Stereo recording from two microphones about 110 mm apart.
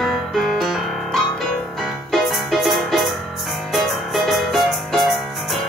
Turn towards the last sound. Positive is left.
turn(degrees=0)  # may be behind; listen again after turning